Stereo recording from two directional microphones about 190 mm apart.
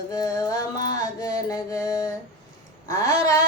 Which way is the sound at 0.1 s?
20° left (ahead or behind).